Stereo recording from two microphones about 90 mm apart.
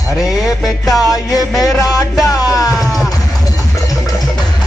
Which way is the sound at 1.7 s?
40° left (ahead or behind).